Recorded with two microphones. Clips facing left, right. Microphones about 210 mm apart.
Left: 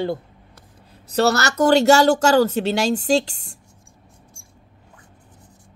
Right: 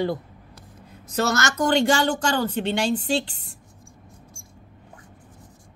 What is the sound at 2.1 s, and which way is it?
Speech, 80° left.